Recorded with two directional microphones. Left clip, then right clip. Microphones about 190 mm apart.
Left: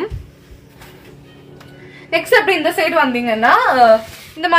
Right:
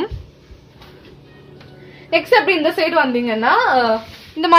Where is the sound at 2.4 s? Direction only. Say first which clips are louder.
Left 1 dB; 55° right (ahead or behind).